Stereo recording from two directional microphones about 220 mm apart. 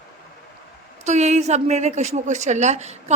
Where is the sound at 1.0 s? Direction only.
30° right (ahead or behind).